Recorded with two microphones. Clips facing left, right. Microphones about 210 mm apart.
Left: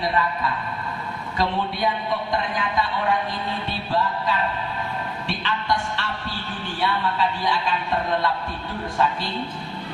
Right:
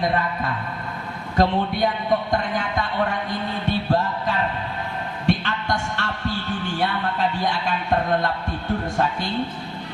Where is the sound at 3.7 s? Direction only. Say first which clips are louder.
Right 4 dB; 45° right (ahead or behind).